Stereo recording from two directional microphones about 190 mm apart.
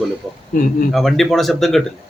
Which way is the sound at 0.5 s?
45° left (ahead or behind).